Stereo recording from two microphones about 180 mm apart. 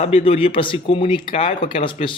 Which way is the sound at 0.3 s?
30° left (ahead or behind).